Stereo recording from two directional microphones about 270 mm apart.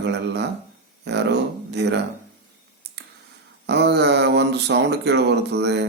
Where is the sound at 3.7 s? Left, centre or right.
Right.